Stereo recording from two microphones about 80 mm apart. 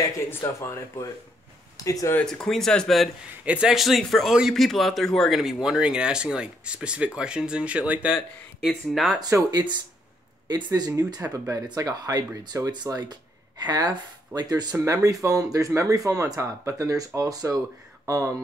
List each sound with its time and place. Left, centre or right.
0.3 s speech: left
1.8 s speech: left
2.2 s a man's voice: centre
8.6 s a man's voice: centre
9.5 s speech: right
12.7 s speech: right